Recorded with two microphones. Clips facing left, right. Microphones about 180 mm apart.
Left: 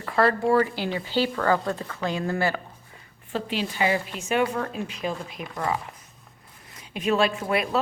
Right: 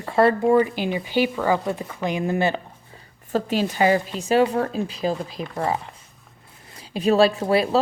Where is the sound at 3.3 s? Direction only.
45° right (ahead or behind).